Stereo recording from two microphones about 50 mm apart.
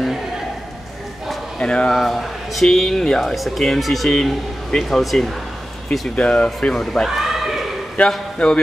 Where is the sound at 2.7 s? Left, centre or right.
Centre.